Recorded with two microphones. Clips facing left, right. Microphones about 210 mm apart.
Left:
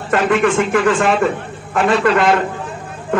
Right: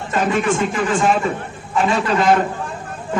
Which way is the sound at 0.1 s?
60° left (ahead or behind).